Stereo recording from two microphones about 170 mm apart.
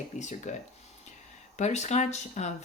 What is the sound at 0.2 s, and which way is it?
Speech, 45° left (ahead or behind).